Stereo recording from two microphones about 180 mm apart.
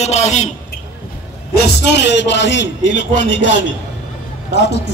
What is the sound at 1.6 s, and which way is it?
A man's voice, 75° left (ahead or behind).